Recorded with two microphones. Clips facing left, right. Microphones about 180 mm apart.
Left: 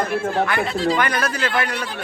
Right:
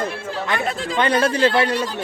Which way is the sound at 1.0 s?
25° right (ahead or behind).